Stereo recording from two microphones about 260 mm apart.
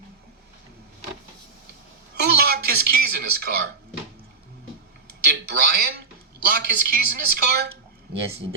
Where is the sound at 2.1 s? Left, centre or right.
Right.